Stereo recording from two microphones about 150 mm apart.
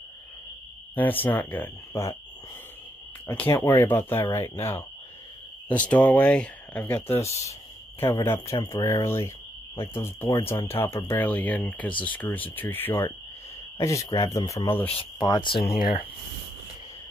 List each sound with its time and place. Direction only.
0.9 s speech: 10° left (ahead or behind)
3.3 s speech: 15° left (ahead or behind)
5.7 s speech: 10° left (ahead or behind)
7.2 s speech: 45° left (ahead or behind)
8.0 s speech: 15° left (ahead or behind)
14.7 s speech: 10° left (ahead or behind)
15.0 s speech: 30° left (ahead or behind)